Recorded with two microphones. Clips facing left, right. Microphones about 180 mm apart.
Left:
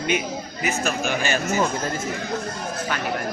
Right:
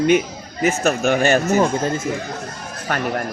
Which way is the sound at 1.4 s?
35° right (ahead or behind).